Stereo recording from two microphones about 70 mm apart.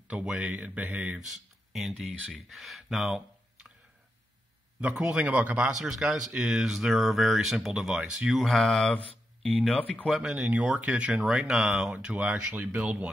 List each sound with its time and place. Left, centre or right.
0.1 s speech: centre
1.7 s speech: centre
5.0 s speech: centre
5.7 s speech: centre
8.0 s speech: centre
8.3 s speech: centre
9.8 s speech: left
10.0 s speech: centre
10.3 s speech: right